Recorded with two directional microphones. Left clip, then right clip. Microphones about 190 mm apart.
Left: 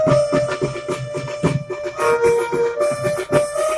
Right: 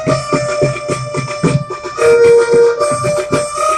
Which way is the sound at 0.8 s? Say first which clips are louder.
Right 6 dB; 30° left (ahead or behind).